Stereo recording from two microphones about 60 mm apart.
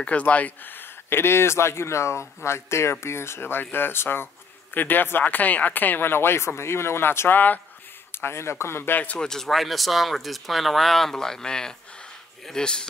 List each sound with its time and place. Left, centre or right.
0.0 s speech: left
8.2 s speech: left
9.2 s speech: centre